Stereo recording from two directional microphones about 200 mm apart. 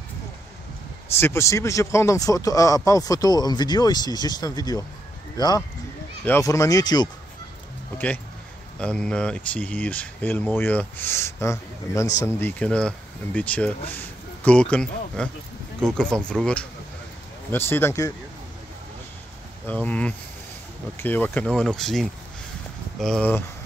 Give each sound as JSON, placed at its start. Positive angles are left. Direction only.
{"t": 1.2, "sound": "speech", "side_deg": 15}
{"t": 8.7, "sound": "speech", "side_deg": 5}
{"t": 19.6, "sound": "speech", "side_deg": 5}